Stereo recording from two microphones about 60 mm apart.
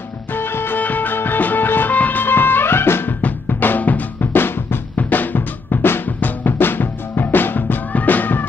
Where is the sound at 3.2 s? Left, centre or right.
Left.